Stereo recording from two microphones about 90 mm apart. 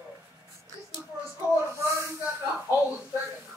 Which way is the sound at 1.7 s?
30° right (ahead or behind).